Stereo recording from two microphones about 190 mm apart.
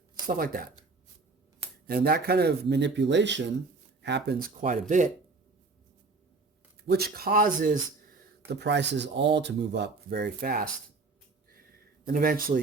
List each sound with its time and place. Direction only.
0.3 s speech: 50° right (ahead or behind)
1.9 s speech: 55° right (ahead or behind)
4.6 s speech: 40° right (ahead or behind)
6.8 s speech: 55° right (ahead or behind)
8.4 s speech: 65° right (ahead or behind)
12.0 s speech: 50° right (ahead or behind)